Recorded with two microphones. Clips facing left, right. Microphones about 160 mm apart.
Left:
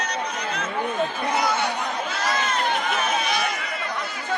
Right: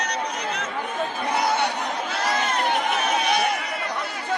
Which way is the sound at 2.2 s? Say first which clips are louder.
Right 1 dB; 60° right (ahead or behind).